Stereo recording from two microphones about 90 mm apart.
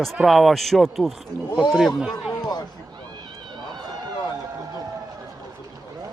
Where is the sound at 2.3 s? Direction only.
50° left (ahead or behind).